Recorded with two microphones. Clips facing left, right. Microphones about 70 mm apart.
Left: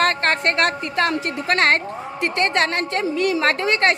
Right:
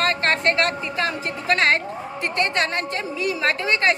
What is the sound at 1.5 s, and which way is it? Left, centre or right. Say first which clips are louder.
A woman's voice: left 1 dB; left.